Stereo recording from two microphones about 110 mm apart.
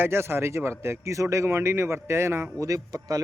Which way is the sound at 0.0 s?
25° right (ahead or behind).